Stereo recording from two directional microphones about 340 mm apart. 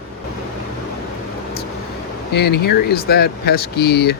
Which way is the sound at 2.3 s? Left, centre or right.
Left.